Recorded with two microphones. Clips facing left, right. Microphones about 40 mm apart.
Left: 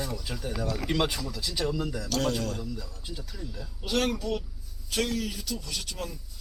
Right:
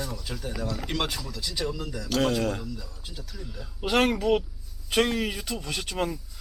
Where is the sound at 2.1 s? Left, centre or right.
Centre.